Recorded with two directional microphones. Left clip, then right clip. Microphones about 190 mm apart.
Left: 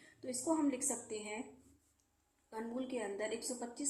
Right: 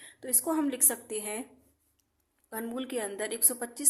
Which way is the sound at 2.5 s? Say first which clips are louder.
Right 6 dB; 50° right (ahead or behind).